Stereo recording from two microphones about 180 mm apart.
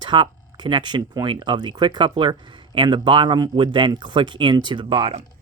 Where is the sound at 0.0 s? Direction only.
25° right (ahead or behind).